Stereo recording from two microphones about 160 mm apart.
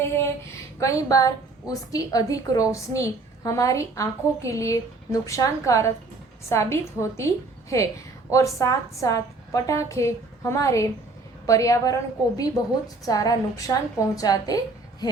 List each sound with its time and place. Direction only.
0.0 s a sound: 15° left (ahead or behind)
0.8 s a woman's voice: 20° left (ahead or behind)
13.1 s a woman's voice: 25° left (ahead or behind)